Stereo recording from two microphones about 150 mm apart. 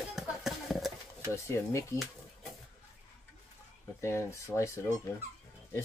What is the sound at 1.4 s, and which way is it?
Speech, 20° left (ahead or behind).